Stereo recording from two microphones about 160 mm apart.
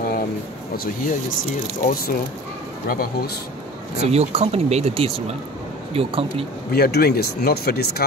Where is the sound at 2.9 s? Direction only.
70° left (ahead or behind).